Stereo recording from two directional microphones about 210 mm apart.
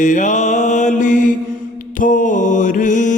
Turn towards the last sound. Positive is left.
turn(degrees=35)  # may be behind; listen again after turning